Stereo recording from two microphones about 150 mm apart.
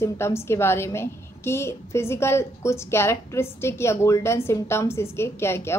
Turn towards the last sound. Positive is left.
turn(degrees=15)  # may be behind; listen again after turning